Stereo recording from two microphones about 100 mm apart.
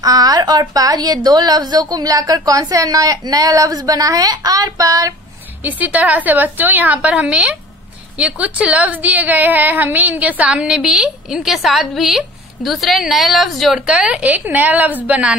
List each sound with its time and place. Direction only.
0.0 s a woman's voice: 40° right (ahead or behind)
5.6 s a woman's voice: 15° right (ahead or behind)